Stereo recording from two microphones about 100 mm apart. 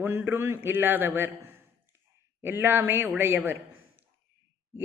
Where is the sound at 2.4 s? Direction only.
20° right (ahead or behind).